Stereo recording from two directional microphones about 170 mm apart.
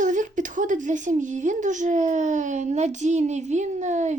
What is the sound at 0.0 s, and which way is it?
A woman's voice, 50° right (ahead or behind).